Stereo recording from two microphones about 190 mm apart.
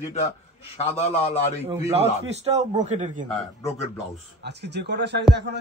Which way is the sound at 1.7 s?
30° right (ahead or behind).